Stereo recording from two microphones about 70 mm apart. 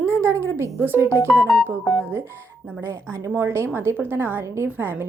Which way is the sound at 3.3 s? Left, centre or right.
Right.